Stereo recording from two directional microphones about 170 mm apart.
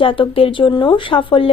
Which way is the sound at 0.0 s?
30° left (ahead or behind).